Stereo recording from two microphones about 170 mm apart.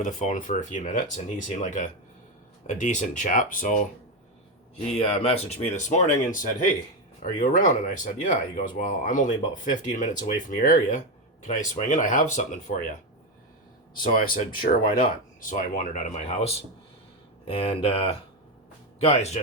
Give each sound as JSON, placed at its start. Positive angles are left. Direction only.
{"t": 0.0, "sound": "speech", "side_deg": 45}
{"t": 4.9, "sound": "speech", "side_deg": 35}
{"t": 14.0, "sound": "speech", "side_deg": 55}